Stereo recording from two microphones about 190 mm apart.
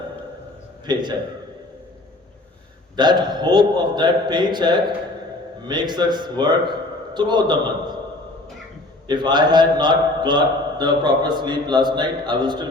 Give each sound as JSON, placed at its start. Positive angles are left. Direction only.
{"t": 0.9, "sound": "a man's voice", "side_deg": -25}
{"t": 2.9, "sound": "a man's voice", "side_deg": -25}
{"t": 9.0, "sound": "a man's voice", "side_deg": -25}